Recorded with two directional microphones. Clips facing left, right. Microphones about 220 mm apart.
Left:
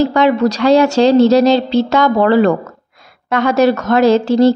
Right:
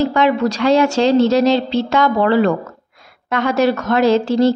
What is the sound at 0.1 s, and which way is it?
A woman's voice, 40° left (ahead or behind).